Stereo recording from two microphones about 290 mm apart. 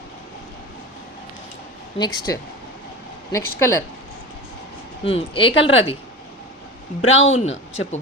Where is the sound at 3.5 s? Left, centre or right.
Centre.